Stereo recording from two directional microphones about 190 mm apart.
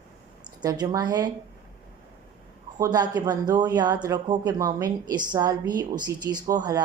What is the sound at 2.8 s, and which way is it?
A woman's voice, 20° right (ahead or behind).